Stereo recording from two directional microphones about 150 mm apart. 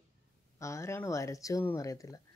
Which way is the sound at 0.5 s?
20° left (ahead or behind).